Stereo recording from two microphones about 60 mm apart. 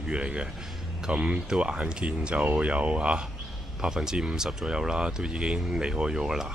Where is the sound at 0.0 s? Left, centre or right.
Centre.